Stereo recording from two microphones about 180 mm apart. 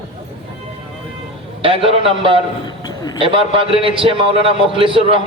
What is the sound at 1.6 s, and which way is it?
Speech, 30° right (ahead or behind).